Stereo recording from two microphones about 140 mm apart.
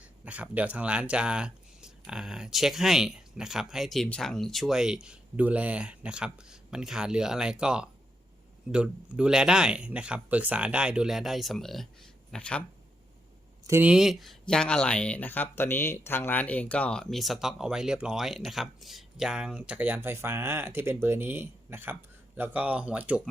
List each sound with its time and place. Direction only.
0.3 s speech: 10° right (ahead or behind); by 12.6 s 10° left (ahead or behind)
13.7 s speech: 15° right (ahead or behind)
13.9 s speech: 5° right (ahead or behind)